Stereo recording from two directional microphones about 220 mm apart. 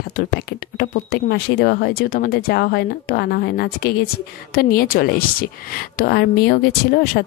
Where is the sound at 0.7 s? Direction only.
45° left (ahead or behind).